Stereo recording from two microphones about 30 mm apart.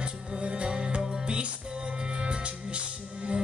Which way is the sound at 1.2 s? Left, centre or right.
Right.